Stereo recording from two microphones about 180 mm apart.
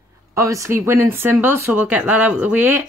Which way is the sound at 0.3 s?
15° right (ahead or behind).